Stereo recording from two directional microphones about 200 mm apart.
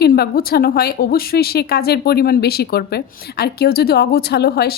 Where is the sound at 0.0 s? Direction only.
50° left (ahead or behind).